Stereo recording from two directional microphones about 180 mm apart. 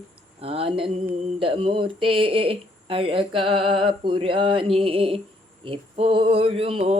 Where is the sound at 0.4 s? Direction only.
30° right (ahead or behind).